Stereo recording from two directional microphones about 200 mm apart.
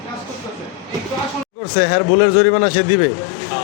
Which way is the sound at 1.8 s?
85° left.